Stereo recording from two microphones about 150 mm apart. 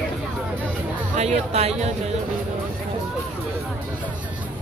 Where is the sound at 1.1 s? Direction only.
45° right (ahead or behind).